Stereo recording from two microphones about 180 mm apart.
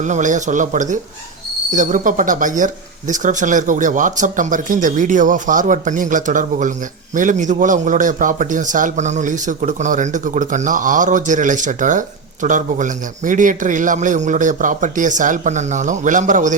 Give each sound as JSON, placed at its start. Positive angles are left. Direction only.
{"t": 0.0, "sound": "speech", "side_deg": -45}